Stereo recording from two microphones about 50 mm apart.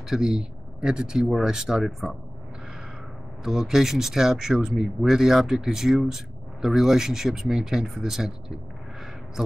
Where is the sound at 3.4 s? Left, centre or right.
Centre.